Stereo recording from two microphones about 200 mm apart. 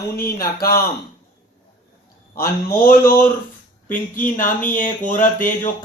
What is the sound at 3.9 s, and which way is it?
Speech, 40° left (ahead or behind).